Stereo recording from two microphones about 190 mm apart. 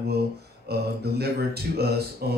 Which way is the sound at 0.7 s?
55° right (ahead or behind).